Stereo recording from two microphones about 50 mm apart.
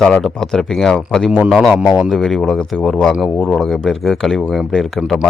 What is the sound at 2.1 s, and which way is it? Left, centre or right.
Speech, centre.